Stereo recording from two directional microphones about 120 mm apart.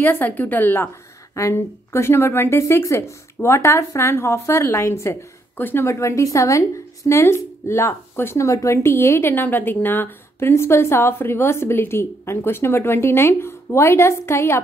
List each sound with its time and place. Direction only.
0.0 s a woman's voice: 15° left (ahead or behind)